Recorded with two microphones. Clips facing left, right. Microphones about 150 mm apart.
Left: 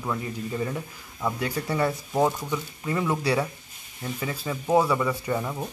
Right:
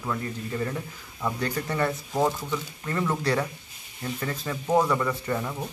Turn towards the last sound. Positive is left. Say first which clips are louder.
# left 1 dB
turn(degrees=5)  # may be behind; listen again after turning